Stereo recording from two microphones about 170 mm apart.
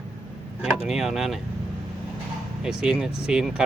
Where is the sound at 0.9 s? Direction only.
Centre (ahead or behind).